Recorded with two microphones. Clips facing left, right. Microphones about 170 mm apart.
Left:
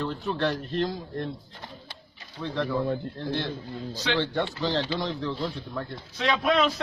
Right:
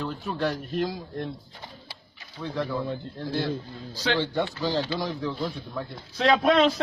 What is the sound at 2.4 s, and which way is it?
Speech, centre (ahead or behind).